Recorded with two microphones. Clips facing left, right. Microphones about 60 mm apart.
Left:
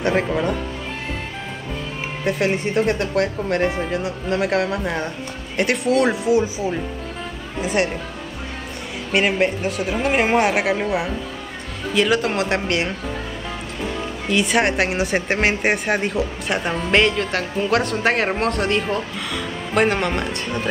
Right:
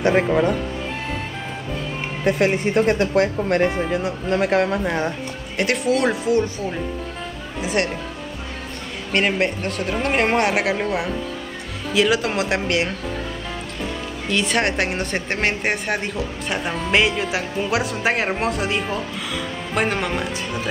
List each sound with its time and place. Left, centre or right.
0.0 s speech: centre
2.2 s a woman's voice: centre
3.2 s speech: centre
3.6 s a woman's voice: centre
9.1 s a woman's voice: centre
14.2 s a woman's voice: centre